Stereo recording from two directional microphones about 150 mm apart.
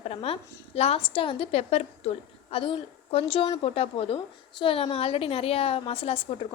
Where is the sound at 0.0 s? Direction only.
40° left (ahead or behind).